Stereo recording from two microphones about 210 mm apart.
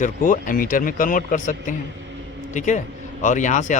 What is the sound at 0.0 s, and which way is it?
Speech, 40° left (ahead or behind).